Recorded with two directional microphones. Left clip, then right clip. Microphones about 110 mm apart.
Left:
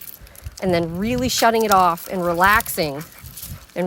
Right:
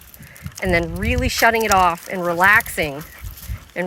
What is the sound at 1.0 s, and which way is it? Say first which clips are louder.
Speech: right 1 dB; 20° left (ahead or behind).